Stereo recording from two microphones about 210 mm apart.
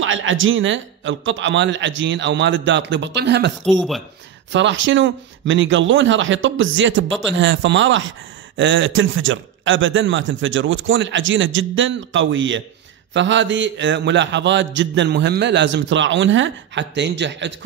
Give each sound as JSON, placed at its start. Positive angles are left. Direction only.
{"t": 0.0, "sound": "a man's voice", "side_deg": -65}